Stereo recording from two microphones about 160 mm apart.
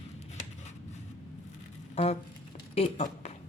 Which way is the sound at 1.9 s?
45° left (ahead or behind).